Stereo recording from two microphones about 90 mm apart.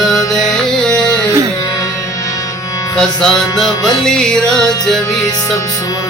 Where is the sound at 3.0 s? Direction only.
5° left (ahead or behind).